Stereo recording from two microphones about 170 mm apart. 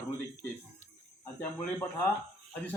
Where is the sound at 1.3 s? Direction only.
15° left (ahead or behind).